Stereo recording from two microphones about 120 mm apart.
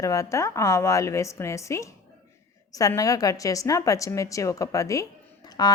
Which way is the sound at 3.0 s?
30° left (ahead or behind).